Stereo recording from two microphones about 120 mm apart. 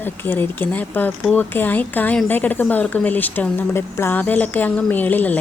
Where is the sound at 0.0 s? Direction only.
15° left (ahead or behind).